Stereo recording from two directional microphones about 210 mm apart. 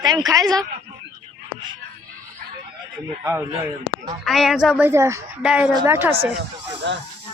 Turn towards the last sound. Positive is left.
turn(degrees=-60)  # may be behind; listen again after turning